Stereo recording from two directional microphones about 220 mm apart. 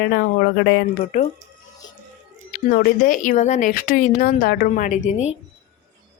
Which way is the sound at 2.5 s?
40° left (ahead or behind).